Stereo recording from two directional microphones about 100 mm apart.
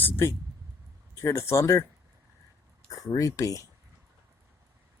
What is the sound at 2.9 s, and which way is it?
Speech, 35° left (ahead or behind).